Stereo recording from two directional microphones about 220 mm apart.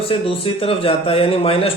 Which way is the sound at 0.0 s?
25° left (ahead or behind).